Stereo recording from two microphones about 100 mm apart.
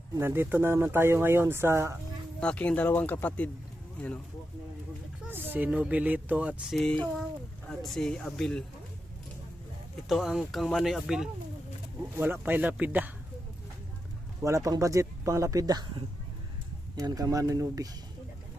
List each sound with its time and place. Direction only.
0.2 s speech: 25° right (ahead or behind)
2.4 s speech: 10° left (ahead or behind)
5.3 s speech: 20° right (ahead or behind)
6.7 s speech: 10° left (ahead or behind)
10.1 s speech: centre (ahead or behind)
12.1 s speech: 20° right (ahead or behind)
14.4 s speech: 35° right (ahead or behind)
17.0 s speech: 40° right (ahead or behind)